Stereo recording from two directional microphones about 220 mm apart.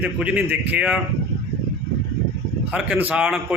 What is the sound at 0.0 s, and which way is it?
Speech, 5° right (ahead or behind).